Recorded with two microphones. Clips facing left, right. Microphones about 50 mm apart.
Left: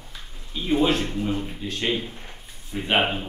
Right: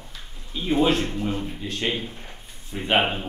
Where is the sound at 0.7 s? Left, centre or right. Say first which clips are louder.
Right 1 dB; centre.